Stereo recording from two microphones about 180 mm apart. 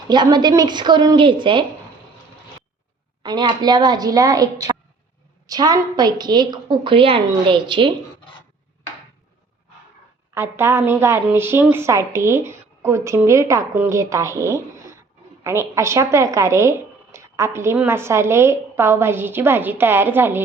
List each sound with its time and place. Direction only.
0.1 s a woman's voice: 25° right (ahead or behind)
3.2 s a woman's voice: 25° right (ahead or behind)
10.3 s speech: 15° right (ahead or behind)